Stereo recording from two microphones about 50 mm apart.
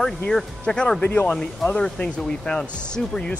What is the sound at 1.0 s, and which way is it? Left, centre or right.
Speech, left.